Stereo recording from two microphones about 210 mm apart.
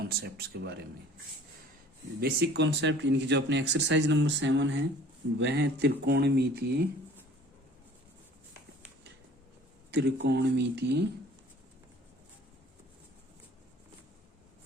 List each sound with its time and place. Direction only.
0.0 s speech: 50° right (ahead or behind)
2.2 s speech: 50° right (ahead or behind)
9.9 s speech: 50° right (ahead or behind)